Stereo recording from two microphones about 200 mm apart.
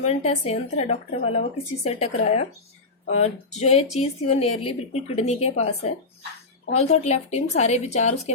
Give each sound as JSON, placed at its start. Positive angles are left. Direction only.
{"t": 0.0, "sound": "speech", "side_deg": 35}